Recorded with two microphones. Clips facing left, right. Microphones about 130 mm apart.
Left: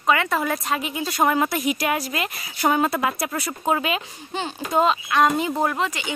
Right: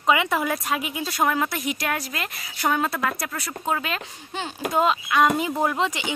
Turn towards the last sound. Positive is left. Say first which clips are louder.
# right 1 dB
turn(degrees=-20)  # may be behind; listen again after turning